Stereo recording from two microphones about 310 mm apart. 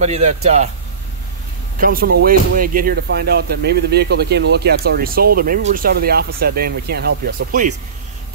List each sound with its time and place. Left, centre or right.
0.0 s speech: right
1.8 s speech: right